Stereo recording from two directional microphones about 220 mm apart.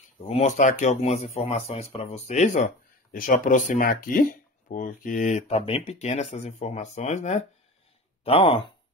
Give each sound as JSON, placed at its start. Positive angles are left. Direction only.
{"t": 0.2, "sound": "speech", "side_deg": 30}